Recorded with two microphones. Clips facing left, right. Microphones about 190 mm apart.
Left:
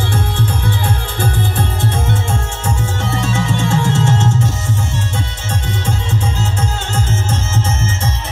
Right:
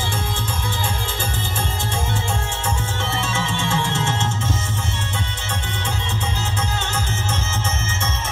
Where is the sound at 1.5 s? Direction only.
60° left (ahead or behind).